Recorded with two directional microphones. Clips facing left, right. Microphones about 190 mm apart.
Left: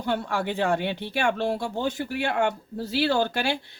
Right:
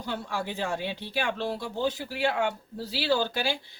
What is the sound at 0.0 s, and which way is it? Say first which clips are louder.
Speech: left 6 dB; 60° left (ahead or behind).